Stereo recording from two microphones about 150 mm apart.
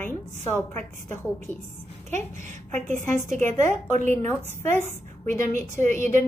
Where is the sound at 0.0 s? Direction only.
15° left (ahead or behind).